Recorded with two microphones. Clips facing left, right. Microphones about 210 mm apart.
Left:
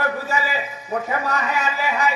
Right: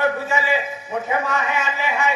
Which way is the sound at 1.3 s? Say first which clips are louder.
Even; 40° left (ahead or behind).